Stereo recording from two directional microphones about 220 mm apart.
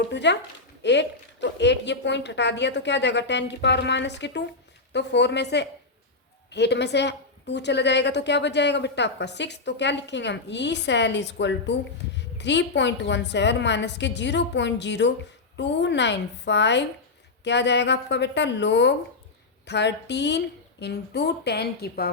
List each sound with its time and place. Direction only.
0.1 s a woman's voice: 50° left (ahead or behind)